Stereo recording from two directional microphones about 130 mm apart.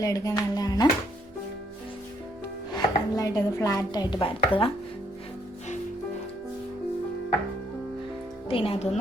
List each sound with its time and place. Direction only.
0.0 s speech: 25° left (ahead or behind)
2.7 s chopping: 30° left (ahead or behind)
8.4 s speech: 45° left (ahead or behind)